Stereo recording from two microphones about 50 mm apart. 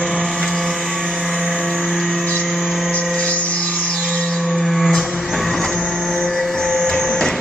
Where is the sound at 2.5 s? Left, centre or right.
Centre.